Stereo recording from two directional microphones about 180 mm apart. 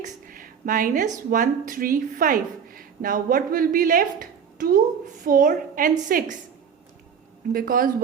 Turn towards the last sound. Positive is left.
turn(degrees=-55)  # may be behind; listen again after turning